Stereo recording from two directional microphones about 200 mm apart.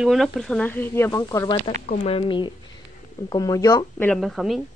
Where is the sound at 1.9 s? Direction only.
30° left (ahead or behind); by 4.2 s 10° left (ahead or behind).